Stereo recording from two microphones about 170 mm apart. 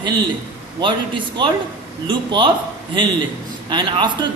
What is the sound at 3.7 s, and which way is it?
Speech, 25° right (ahead or behind).